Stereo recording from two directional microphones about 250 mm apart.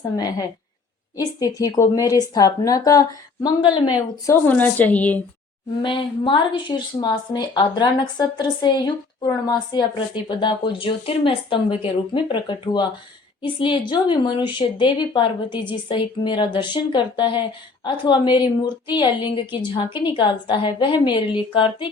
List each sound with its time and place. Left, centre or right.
1.1 s speech: centre
4.3 s speech: centre
5.8 s a woman's voice: centre